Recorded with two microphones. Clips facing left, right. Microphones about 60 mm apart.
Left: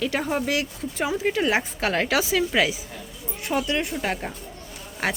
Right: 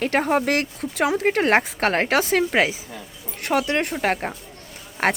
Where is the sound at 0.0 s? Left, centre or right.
Right.